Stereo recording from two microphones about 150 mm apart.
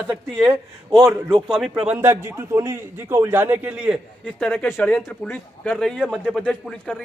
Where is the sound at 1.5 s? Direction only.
Centre (ahead or behind).